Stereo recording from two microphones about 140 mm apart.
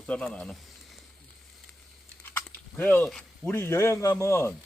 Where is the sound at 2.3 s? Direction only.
15° left (ahead or behind).